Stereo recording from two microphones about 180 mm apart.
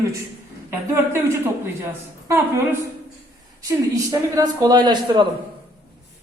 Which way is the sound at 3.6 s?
20° right (ahead or behind).